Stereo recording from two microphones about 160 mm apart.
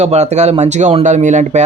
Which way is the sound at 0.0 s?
45° right (ahead or behind).